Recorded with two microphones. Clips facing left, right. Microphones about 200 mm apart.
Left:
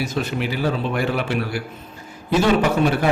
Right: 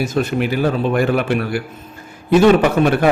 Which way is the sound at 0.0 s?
50° right (ahead or behind).